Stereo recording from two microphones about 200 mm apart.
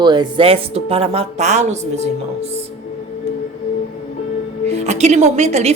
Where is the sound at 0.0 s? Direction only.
20° right (ahead or behind).